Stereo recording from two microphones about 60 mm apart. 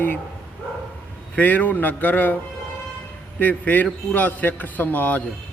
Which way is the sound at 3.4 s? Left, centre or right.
Left.